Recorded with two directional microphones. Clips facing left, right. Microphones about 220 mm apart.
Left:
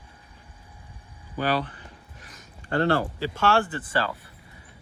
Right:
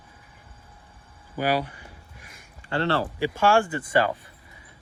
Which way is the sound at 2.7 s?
45° left (ahead or behind).